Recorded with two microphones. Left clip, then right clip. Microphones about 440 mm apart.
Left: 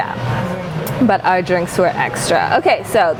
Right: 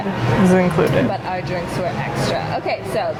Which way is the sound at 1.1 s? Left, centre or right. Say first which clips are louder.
Left 9 dB; left.